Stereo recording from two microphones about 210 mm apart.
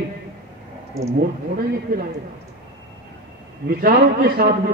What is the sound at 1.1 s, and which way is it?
Speech, 45° right (ahead or behind).